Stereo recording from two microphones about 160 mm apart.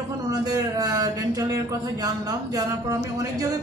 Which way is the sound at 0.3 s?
25° right (ahead or behind).